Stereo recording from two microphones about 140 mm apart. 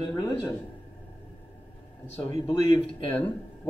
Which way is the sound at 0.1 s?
25° left (ahead or behind).